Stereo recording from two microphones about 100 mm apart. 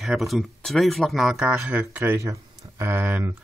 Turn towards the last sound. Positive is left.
turn(degrees=-20)  # may be behind; listen again after turning